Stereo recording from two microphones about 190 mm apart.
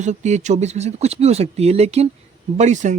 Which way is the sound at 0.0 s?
40° right (ahead or behind).